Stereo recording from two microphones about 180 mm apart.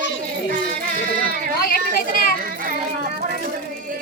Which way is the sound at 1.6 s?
55° left (ahead or behind).